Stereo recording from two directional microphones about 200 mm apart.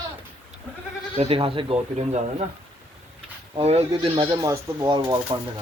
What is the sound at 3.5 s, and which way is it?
Speech, 30° right (ahead or behind).